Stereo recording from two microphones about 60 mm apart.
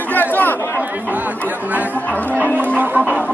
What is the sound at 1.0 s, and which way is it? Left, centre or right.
Chatter, right.